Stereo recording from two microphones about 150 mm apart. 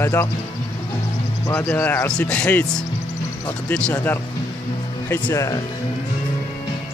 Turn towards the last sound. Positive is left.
turn(degrees=25)  # may be behind; listen again after turning